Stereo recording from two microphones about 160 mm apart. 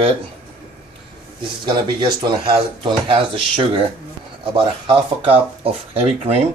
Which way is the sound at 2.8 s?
30° right (ahead or behind).